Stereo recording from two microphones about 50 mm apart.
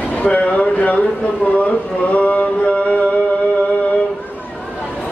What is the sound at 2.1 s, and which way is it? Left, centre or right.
Music, left.